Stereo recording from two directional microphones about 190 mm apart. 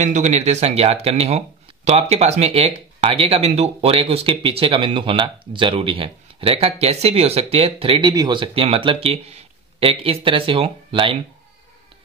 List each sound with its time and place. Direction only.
0.0 s speech: 40° right (ahead or behind)